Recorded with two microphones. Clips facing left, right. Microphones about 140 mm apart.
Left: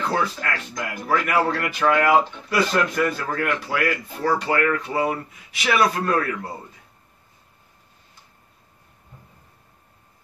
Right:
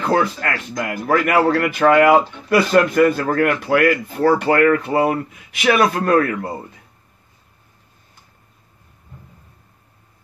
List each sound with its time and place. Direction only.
0.0 s speech: 50° right (ahead or behind)